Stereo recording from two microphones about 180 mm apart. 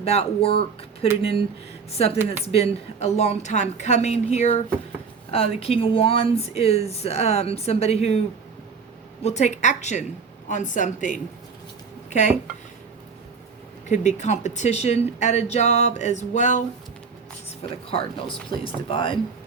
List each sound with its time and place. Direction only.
0.0 s speech: 35° left (ahead or behind)
1.9 s speech: 35° left (ahead or behind)
9.2 s a woman's voice: 40° left (ahead or behind)
13.8 s speech: 45° left (ahead or behind)
17.9 s speech: 30° left (ahead or behind)